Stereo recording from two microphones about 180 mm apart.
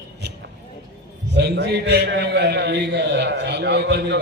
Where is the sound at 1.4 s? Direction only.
65° right (ahead or behind).